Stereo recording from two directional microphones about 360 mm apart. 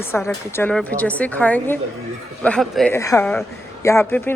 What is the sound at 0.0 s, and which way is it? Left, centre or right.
Speech, centre.